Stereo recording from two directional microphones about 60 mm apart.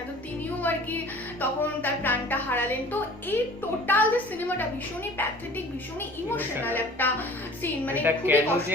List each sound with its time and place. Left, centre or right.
0.6 s speech: left
6.3 s a woman's voice: left
8.3 s a woman's voice: right